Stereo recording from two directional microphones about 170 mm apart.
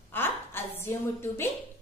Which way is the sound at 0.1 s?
10° left (ahead or behind).